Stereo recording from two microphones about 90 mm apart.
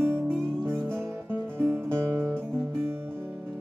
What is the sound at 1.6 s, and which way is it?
Music, 30° right (ahead or behind).